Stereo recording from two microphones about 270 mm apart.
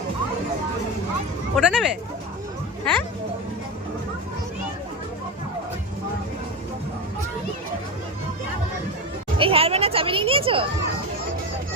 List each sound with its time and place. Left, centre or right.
1.5 s speech: centre
9.4 s children playing: right